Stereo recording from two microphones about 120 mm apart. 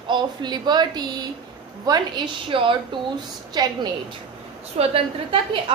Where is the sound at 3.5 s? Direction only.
35° right (ahead or behind).